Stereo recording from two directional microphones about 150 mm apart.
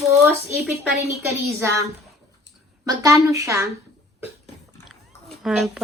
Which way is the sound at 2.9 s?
20° right (ahead or behind).